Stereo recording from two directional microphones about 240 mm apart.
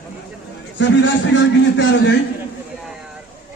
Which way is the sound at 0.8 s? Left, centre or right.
Left.